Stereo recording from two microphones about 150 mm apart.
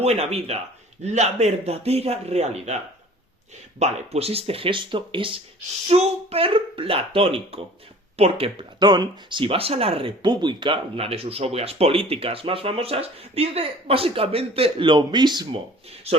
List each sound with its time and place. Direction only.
0.0 s speech: 45° right (ahead or behind)
3.8 s speech: 50° right (ahead or behind); by 15.4 s 30° right (ahead or behind)
16.1 s speech: 45° right (ahead or behind)